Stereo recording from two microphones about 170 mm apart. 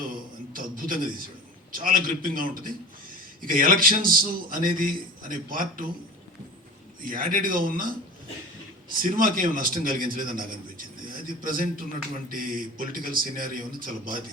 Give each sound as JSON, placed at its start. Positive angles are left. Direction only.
{"t": 0.5, "sound": "a sound", "side_deg": -55}
{"t": 1.7, "sound": "a man's voice", "side_deg": -55}
{"t": 7.0, "sound": "a man's voice", "side_deg": -55}
{"t": 9.0, "sound": "a man's voice", "side_deg": -55}